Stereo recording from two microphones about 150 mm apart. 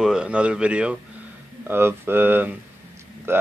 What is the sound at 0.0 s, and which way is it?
Speech, 5° right (ahead or behind).